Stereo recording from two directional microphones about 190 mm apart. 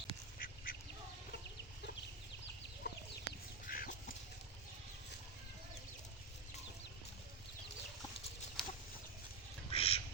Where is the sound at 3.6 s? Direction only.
50° left (ahead or behind).